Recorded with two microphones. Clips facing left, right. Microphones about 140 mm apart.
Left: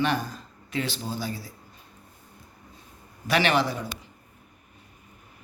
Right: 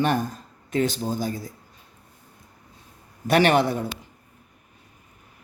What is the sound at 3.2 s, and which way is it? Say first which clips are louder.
Speech: right 5 dB; 50° right (ahead or behind).